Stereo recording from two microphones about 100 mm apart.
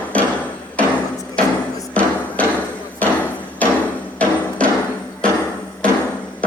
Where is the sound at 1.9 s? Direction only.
15° left (ahead or behind).